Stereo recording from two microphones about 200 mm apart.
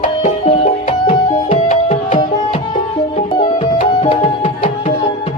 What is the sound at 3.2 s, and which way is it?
Music, 25° left (ahead or behind).